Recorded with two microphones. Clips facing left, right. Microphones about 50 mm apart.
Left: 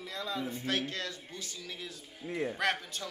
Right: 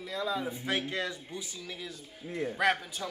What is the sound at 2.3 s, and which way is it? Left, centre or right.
Speech, centre.